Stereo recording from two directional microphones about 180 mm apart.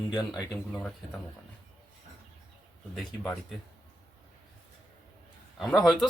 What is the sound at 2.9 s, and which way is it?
Speech, centre (ahead or behind).